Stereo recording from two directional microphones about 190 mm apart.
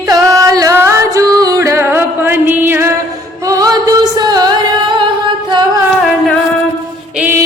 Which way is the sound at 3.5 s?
20° right (ahead or behind).